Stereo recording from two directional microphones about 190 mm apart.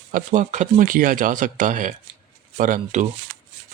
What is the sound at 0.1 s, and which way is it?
Speech, 40° right (ahead or behind).